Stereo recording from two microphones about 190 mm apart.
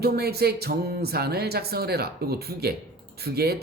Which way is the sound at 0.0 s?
55° right (ahead or behind).